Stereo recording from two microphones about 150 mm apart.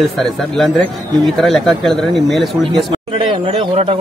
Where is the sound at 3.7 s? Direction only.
45° right (ahead or behind).